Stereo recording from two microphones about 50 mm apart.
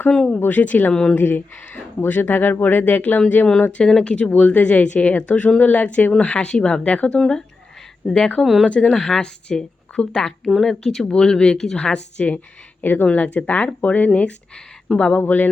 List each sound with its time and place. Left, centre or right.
0.1 s speech: centre
0.3 s speech: left
0.9 s speech: centre
1.2 s speech: left
3.2 s speech: left
6.1 s speech: left
6.9 s speech: left
7.2 s speech: centre
8.6 s speech: left; by 11.0 s centre
11.0 s speech: centre
12.8 s speech: left
14.9 s speech: centre
15.3 s speech: left